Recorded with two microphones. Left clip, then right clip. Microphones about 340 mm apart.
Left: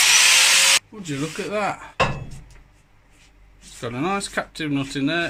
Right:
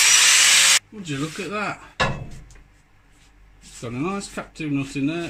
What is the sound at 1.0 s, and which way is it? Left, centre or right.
Speech, centre.